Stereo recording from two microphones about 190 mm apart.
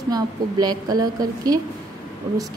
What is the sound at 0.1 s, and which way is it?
A woman's voice, 20° right (ahead or behind).